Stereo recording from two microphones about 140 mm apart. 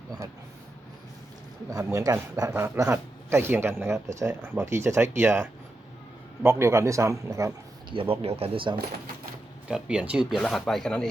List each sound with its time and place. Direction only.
1.7 s a man's voice: 20° right (ahead or behind)
8.1 s speech: 45° right (ahead or behind)
9.6 s speech: 5° right (ahead or behind)